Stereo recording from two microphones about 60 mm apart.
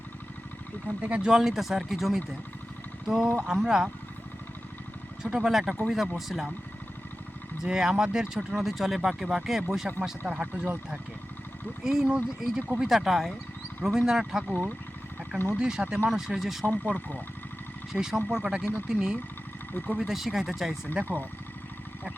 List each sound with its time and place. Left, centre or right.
1.2 s speech: centre
5.2 s speech: centre
7.6 s speech: centre
11.8 s speech: centre
15.5 s speech: centre
16.6 s speech: left
17.9 s speech: centre